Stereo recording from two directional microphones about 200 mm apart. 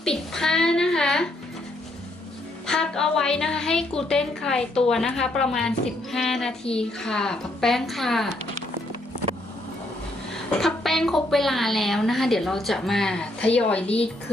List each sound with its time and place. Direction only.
0.0 s a child's voice: 5° left (ahead or behind)
2.6 s a woman's voice: 5° left (ahead or behind)
10.3 s a woman's voice: centre (ahead or behind)